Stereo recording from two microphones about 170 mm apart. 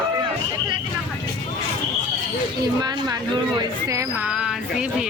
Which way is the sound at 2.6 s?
25° right (ahead or behind).